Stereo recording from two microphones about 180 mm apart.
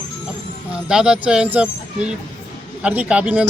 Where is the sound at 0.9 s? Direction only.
5° right (ahead or behind).